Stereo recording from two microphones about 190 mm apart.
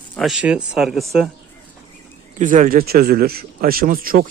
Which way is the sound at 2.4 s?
45° right (ahead or behind).